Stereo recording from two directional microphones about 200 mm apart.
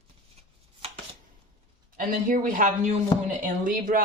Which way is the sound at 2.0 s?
45° right (ahead or behind).